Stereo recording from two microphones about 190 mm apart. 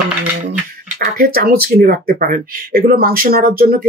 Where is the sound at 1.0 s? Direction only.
50° right (ahead or behind).